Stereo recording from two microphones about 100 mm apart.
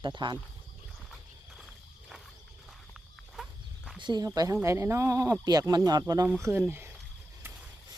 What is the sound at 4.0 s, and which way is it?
Speech, 50° right (ahead or behind).